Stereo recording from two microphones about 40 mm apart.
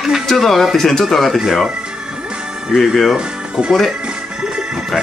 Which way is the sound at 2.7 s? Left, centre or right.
Centre.